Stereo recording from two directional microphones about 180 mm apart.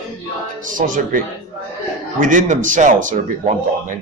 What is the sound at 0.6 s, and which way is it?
Speech, 45° right (ahead or behind).